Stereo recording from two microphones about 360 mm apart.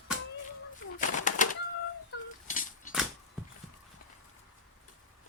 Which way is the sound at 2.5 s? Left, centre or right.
Left.